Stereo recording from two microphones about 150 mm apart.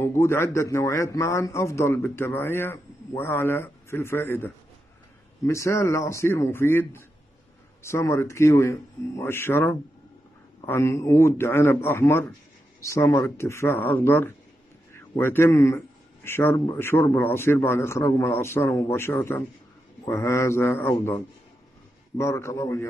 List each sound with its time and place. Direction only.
0.0 s a man's voice: 15° left (ahead or behind)